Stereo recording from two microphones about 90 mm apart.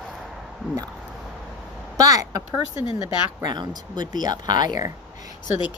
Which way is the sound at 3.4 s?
50° right (ahead or behind).